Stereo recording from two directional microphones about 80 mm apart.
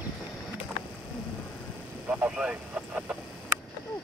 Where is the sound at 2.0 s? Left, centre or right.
Centre.